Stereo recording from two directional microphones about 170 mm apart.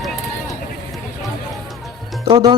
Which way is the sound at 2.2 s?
30° right (ahead or behind).